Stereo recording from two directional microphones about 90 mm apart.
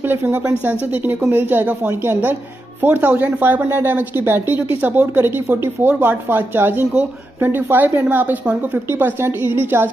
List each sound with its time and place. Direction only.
0.1 s speech: 25° right (ahead or behind)